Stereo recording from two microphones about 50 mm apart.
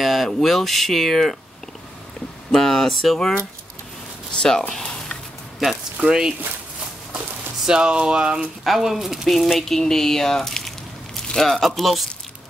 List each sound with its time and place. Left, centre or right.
0.0 s speech: centre
2.5 s speech: centre
4.4 s speech: centre
6.0 s speech: centre
7.6 s speech: centre
8.6 s speech: centre
9.8 s speech: centre